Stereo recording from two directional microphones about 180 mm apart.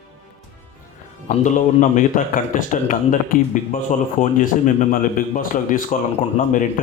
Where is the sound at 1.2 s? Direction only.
45° left (ahead or behind).